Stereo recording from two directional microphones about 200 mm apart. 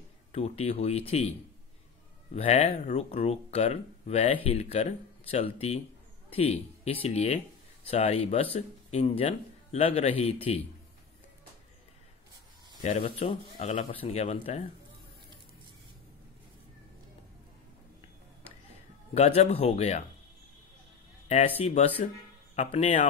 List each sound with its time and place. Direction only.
0.3 s speech: 30° left (ahead or behind)
2.3 s speech: 30° left (ahead or behind)
12.8 s speech: 30° left (ahead or behind)
19.1 s speech: 30° left (ahead or behind)
21.3 s speech: 30° left (ahead or behind)